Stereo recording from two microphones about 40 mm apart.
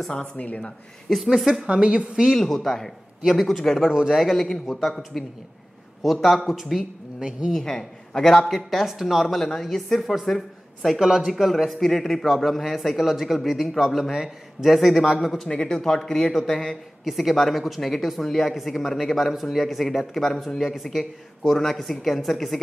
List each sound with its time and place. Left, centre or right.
0.1 s speech: left
1.1 s speech: centre
1.7 s a woman's voice: right
2.3 s speech: centre
3.6 s speech: centre
3.9 s speech: centre
4.2 s speech: centre
6.2 s speech: centre
7.5 s speech: centre
8.8 s speech: centre
11.0 s speech: centre
11.4 s speech: centre
15.4 s speech: centre
17.0 s speech: centre